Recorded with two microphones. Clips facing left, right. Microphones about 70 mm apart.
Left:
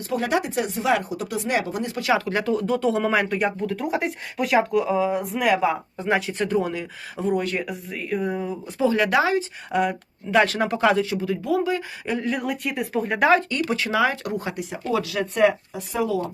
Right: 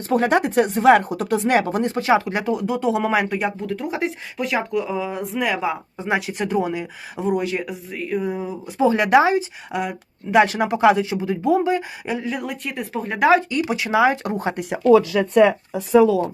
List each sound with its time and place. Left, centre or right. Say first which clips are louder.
0.0 s speech: right 5 dB; right; by 8.5 s centre
8.8 s speech: right 4 dB; right
9.7 s speech: left 3 dB; centre
10.3 s speech: right 3 dB; centre
12.0 s speech: even; centre; by 14.5 s right